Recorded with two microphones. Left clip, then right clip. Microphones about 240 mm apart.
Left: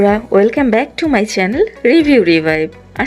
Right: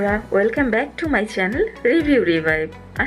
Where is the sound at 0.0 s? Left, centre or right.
Left.